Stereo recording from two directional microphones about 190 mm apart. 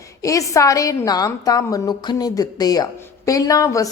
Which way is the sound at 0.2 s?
15° left (ahead or behind).